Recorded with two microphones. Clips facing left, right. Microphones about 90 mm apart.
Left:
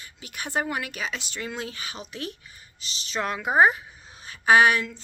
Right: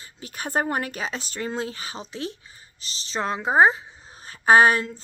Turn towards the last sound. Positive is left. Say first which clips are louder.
# right 2 dB
turn(degrees=-35)  # may be behind; listen again after turning